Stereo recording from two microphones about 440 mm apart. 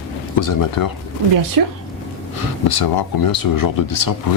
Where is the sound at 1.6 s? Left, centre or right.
Right.